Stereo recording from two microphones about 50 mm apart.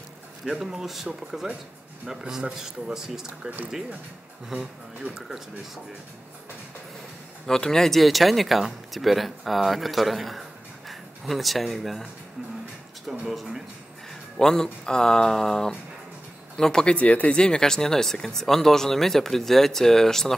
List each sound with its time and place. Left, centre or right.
0.5 s a man's voice: centre
3.4 s speech: right
7.4 s speech: centre
13.2 s speech: centre
14.4 s speech: centre
16.9 s speech: left; by 20.3 s centre